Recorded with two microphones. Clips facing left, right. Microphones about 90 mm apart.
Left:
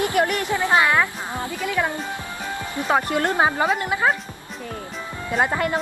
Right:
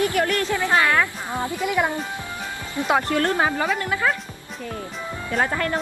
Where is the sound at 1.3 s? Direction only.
20° right (ahead or behind).